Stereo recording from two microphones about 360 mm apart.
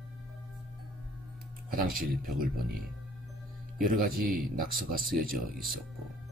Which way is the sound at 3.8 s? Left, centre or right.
Right.